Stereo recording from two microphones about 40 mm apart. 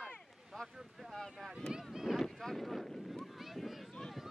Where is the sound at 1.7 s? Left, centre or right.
Centre.